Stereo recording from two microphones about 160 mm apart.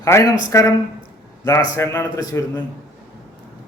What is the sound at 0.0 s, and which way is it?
Speech, 20° left (ahead or behind).